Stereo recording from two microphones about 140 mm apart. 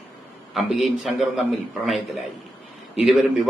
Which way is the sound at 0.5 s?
Centre (ahead or behind).